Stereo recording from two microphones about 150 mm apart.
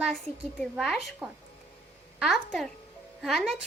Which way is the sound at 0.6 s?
Centre (ahead or behind).